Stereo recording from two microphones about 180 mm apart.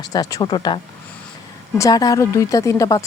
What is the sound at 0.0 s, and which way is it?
Speech, 20° left (ahead or behind).